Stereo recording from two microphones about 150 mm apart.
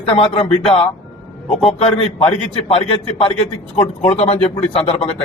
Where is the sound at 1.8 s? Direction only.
40° left (ahead or behind).